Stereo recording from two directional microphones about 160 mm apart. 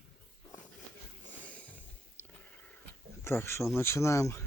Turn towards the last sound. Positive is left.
turn(degrees=15)  # may be behind; listen again after turning